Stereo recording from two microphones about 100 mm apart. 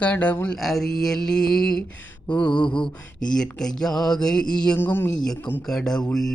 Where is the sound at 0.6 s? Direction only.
5° left (ahead or behind).